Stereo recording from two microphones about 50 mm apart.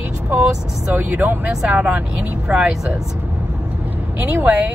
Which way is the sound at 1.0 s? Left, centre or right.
Right.